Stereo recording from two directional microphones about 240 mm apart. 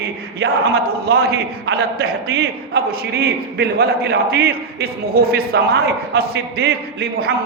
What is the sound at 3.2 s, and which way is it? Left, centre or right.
A man's voice, right.